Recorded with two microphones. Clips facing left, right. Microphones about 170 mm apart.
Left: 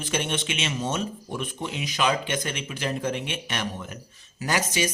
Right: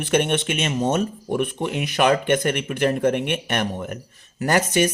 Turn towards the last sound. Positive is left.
turn(degrees=-55)  # may be behind; listen again after turning